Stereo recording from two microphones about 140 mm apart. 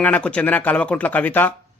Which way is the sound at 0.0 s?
10° left (ahead or behind).